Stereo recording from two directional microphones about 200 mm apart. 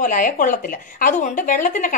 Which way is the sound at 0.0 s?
40° left (ahead or behind).